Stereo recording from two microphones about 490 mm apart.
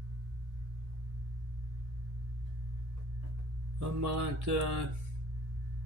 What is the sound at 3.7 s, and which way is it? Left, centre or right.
Mantra, right.